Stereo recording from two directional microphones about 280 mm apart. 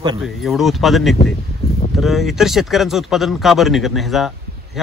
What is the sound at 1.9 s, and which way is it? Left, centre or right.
Speech, centre.